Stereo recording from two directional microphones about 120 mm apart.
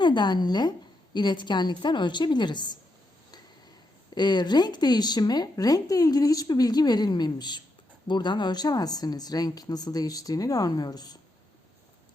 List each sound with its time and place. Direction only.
0.0 s speech: 40° left (ahead or behind)
4.1 s speech: 35° left (ahead or behind)